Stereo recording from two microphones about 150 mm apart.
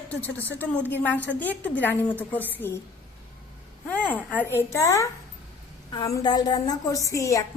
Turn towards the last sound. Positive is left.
turn(degrees=20)  # may be behind; listen again after turning